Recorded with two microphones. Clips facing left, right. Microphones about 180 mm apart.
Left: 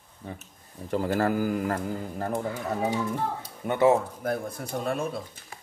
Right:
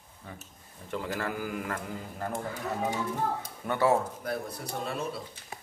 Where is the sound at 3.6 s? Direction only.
20° left (ahead or behind).